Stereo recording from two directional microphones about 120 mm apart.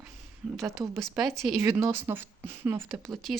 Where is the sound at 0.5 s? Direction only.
Centre (ahead or behind).